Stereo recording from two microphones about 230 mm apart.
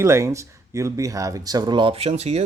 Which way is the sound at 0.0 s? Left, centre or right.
Centre.